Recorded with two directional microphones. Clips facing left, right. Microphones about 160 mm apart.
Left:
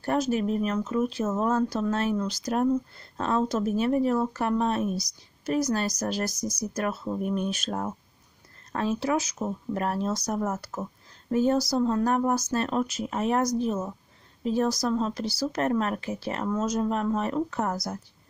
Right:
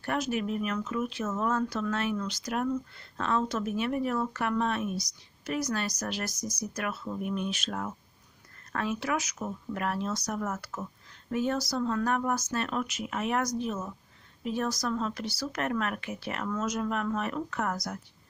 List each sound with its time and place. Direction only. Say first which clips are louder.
0.0 s speech: left 5 dB; 35° left (ahead or behind)